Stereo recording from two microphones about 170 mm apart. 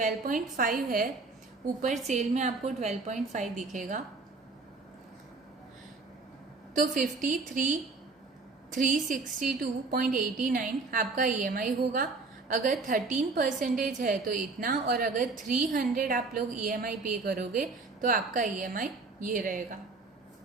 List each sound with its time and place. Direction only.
0.0 s a woman's voice: 50° right (ahead or behind)
1.8 s a woman's voice: 45° right (ahead or behind)
6.7 s a woman's voice: 50° right (ahead or behind)